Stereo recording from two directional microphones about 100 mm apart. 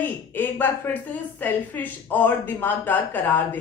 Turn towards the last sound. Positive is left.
turn(degrees=20)  # may be behind; listen again after turning